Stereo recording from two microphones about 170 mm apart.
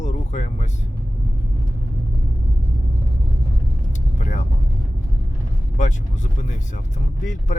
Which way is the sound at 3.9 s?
45° left (ahead or behind).